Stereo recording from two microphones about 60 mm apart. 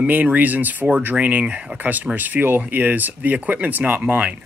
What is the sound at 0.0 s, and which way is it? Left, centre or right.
Speech, right.